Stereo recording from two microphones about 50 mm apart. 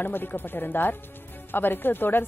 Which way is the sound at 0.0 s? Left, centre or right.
Left.